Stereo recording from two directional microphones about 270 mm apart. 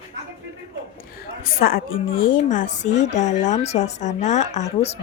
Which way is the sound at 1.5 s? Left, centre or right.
Left.